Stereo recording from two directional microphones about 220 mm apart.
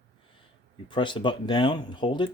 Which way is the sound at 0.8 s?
20° left (ahead or behind).